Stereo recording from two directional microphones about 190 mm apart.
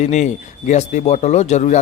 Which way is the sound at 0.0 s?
40° left (ahead or behind).